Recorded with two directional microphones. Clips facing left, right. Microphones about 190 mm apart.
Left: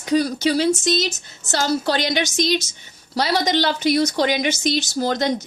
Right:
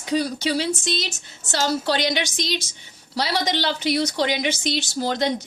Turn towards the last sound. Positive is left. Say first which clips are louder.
# left 2 dB
turn(degrees=45)  # may be behind; listen again after turning